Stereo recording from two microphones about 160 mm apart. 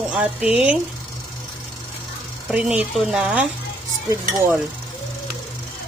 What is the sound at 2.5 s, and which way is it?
A woman's voice, 5° right (ahead or behind).